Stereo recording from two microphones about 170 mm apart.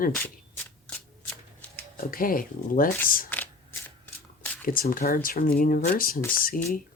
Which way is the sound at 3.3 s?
10° left (ahead or behind).